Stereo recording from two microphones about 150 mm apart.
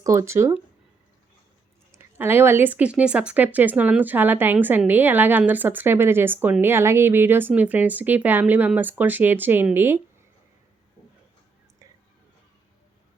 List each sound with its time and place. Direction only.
0.0 s speech: 20° right (ahead or behind)
1.9 s speech: 15° right (ahead or behind)